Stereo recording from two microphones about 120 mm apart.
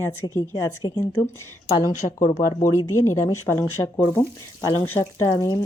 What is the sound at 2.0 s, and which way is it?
Speech, 55° left (ahead or behind).